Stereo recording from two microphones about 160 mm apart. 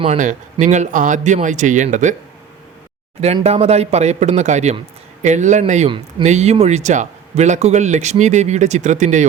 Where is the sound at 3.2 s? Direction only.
40° right (ahead or behind).